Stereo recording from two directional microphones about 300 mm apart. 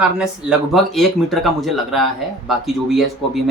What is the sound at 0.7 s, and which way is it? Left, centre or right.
Speech, centre.